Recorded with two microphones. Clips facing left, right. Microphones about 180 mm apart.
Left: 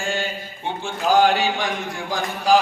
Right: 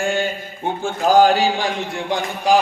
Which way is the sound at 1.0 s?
40° right (ahead or behind).